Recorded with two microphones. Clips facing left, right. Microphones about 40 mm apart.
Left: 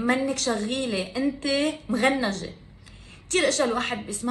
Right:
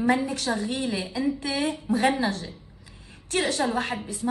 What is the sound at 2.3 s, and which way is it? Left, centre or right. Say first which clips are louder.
Speech: left 1 dB; left.